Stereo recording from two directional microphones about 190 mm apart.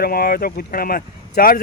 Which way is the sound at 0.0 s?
50° left (ahead or behind).